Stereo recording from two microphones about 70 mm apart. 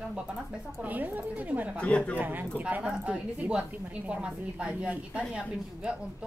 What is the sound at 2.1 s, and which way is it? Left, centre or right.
Speech, right.